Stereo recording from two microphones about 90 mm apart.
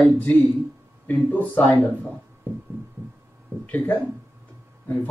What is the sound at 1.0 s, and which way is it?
Speech, 20° left (ahead or behind).